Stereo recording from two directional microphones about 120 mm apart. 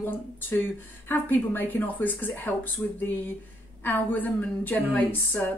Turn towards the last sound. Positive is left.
turn(degrees=15)  # may be behind; listen again after turning